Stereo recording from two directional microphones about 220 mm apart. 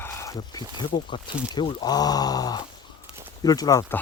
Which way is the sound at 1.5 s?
20° left (ahead or behind).